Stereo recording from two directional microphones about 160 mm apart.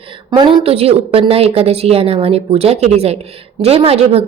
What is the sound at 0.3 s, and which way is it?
A woman's voice, 30° right (ahead or behind).